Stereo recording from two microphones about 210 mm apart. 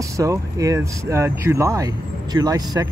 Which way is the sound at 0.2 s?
15° right (ahead or behind).